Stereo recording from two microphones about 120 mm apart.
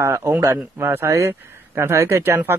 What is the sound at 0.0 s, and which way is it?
A man's voice, 20° right (ahead or behind).